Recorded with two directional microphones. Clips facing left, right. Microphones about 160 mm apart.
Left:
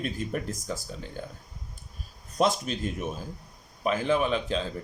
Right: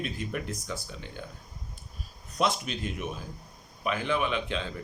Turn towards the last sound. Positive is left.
turn(degrees=40)  # may be behind; listen again after turning